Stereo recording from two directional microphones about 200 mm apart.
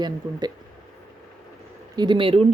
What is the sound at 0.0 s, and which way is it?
Speech, 20° right (ahead or behind).